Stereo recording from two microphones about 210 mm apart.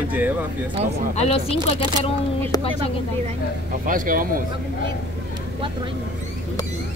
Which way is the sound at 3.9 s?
40° right (ahead or behind).